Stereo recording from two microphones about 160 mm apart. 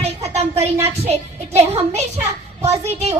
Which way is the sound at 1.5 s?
45° right (ahead or behind).